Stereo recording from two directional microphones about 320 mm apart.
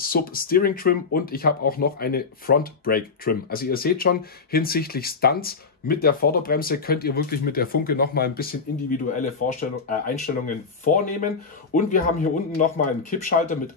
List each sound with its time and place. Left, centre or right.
0.0 s speech: left